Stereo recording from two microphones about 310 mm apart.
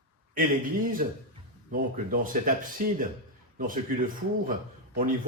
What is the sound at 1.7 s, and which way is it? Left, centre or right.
A man's voice, right.